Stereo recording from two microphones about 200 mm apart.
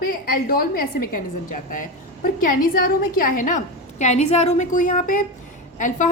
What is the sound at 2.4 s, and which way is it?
A woman's voice, 45° left (ahead or behind).